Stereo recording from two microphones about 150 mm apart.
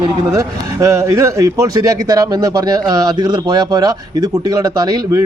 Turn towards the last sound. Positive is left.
turn(degrees=-25)  # may be behind; listen again after turning